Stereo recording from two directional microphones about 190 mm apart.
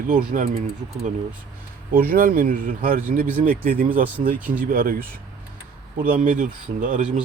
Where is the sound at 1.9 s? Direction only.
50° right (ahead or behind).